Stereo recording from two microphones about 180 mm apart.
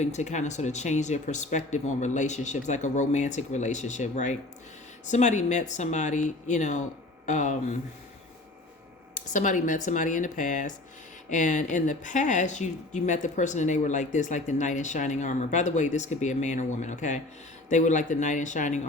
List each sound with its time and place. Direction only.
0.0 s speech: 40° left (ahead or behind)
9.2 s speech: 45° left (ahead or behind)